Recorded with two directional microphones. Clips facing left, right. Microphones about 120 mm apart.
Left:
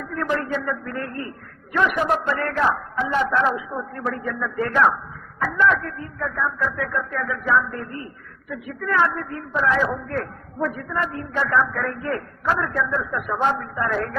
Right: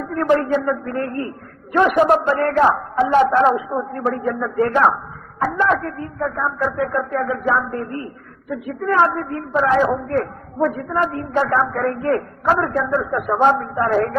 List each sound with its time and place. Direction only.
0.0 s a woman's voice: 40° right (ahead or behind)